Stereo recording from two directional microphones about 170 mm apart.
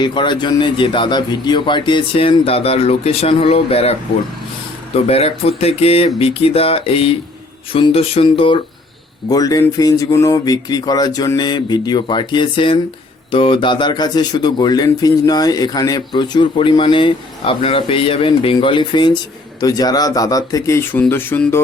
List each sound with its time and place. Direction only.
0.0 s speech: 30° left (ahead or behind)
4.9 s speech: 35° left (ahead or behind); by 21.6 s 10° left (ahead or behind)